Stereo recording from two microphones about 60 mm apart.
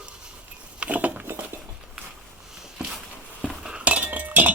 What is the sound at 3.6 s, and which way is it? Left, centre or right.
Chink, centre.